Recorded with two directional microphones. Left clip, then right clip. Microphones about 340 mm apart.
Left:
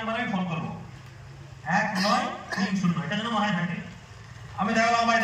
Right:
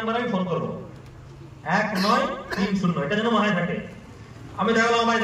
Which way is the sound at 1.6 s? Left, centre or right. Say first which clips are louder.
Right 2 dB; centre.